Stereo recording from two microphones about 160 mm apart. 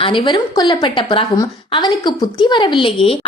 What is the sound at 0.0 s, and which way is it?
A woman's voice, 30° left (ahead or behind).